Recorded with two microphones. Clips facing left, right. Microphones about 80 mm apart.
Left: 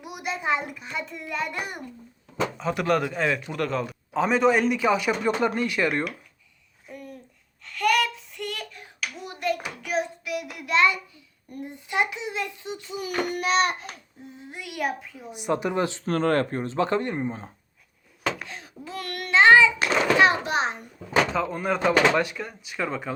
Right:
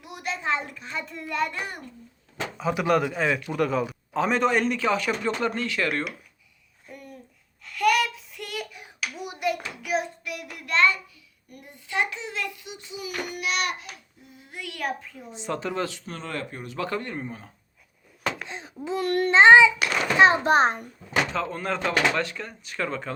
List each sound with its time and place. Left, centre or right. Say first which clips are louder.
0.0 s a man's voice: left 1 dB; centre
2.6 s child singing: right 2 dB; centre
3.5 s a man's voice: right 3 dB; centre
6.8 s babbling: left 3 dB; centre
7.6 s a sound: right 1 dB; centre
9.8 s child singing: even; centre
11.4 s speech: left 7 dB; left
12.6 s a child's voice: left 4 dB; left
14.3 s a man's voice: left 3 dB; centre
15.3 s speech: left 4 dB; centre
16.0 s speech: left 11 dB; left
18.4 s a child's voice: right 6 dB; right
20.4 s a child's voice: right 6 dB; right
21.3 s a man's voice: left 2 dB; centre